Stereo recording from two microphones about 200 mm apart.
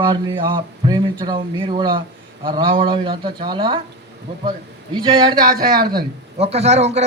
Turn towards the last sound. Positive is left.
turn(degrees=-35)  # may be behind; listen again after turning